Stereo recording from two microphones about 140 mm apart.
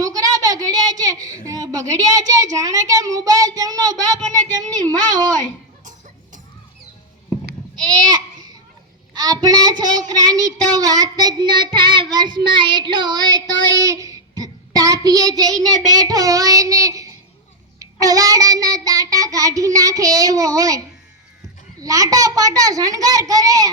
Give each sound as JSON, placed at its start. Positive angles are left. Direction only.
{"t": 0.0, "sound": "a sound", "side_deg": -25}
{"t": 1.5, "sound": "child singing", "side_deg": -25}
{"t": 7.9, "sound": "babbling", "side_deg": -30}
{"t": 9.1, "sound": "child singing", "side_deg": -30}